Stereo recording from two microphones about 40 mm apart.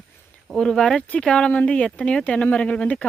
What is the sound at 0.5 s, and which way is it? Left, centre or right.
Speech, centre.